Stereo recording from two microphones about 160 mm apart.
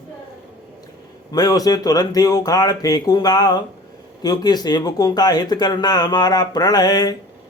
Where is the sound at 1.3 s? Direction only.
25° left (ahead or behind).